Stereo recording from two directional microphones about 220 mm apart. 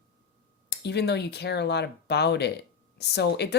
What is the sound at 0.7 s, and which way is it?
Speech, 50° left (ahead or behind).